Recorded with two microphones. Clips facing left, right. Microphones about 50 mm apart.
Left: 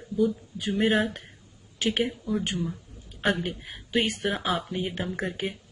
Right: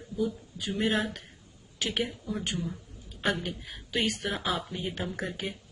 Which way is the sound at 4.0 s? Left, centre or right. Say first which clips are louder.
Even; left.